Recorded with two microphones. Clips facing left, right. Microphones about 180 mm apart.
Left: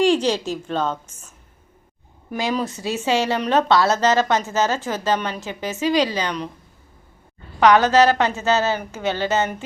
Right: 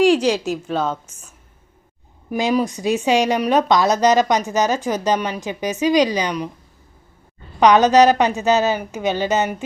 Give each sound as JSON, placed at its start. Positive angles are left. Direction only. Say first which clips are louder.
{"t": 0.0, "sound": "a woman's voice", "louder": "right 3 dB", "side_deg": -10}
{"t": 2.3, "sound": "a woman's voice", "louder": "right 5 dB", "side_deg": -15}
{"t": 7.6, "sound": "a woman's voice", "louder": "right 2 dB", "side_deg": -20}